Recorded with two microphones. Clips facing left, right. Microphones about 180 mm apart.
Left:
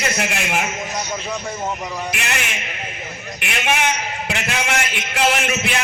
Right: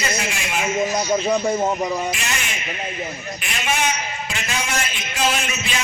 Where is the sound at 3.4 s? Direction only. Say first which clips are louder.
Left 3 dB; 65° left (ahead or behind).